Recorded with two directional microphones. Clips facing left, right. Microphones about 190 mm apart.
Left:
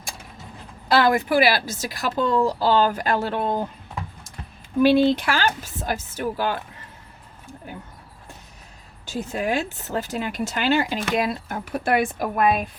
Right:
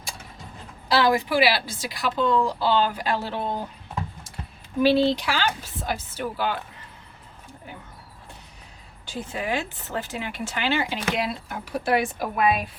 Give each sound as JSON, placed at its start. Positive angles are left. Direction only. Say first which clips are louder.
{"t": 0.9, "sound": "speech", "louder": "left 2 dB", "side_deg": 50}
{"t": 4.8, "sound": "speech", "louder": "left 3 dB", "side_deg": 55}
{"t": 9.0, "sound": "speech", "louder": "left 4 dB", "side_deg": 45}